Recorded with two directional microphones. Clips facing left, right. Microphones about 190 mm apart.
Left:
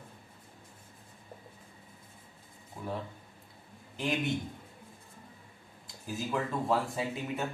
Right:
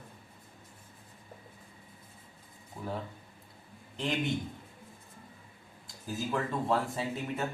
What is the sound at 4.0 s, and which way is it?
Speech, centre (ahead or behind).